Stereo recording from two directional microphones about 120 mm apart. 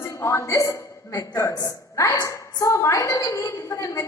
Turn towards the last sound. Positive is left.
turn(degrees=30)  # may be behind; listen again after turning